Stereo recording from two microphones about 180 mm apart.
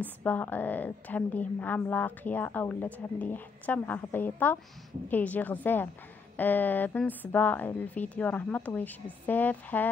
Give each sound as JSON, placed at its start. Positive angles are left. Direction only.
{"t": 0.0, "sound": "a woman's voice", "side_deg": 10}